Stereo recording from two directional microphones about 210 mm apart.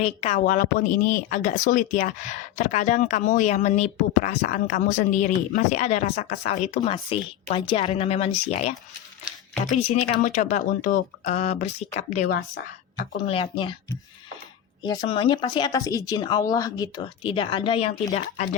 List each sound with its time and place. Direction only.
0.0 s speech: 30° left (ahead or behind)
9.8 s speech: 30° left (ahead or behind)
14.8 s speech: 20° left (ahead or behind)